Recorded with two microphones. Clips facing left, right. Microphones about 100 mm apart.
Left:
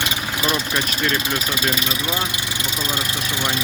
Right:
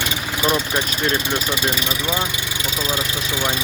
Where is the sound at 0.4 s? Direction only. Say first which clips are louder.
Right 3 dB; 20° right (ahead or behind).